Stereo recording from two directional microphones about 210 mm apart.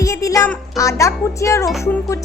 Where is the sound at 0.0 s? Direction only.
15° left (ahead or behind).